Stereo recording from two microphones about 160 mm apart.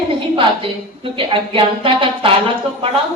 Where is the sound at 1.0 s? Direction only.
35° right (ahead or behind).